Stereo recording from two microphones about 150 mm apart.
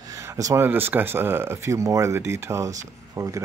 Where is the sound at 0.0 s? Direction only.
20° right (ahead or behind).